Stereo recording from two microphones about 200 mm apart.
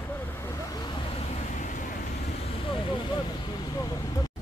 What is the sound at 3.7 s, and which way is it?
Vehicle, 20° left (ahead or behind).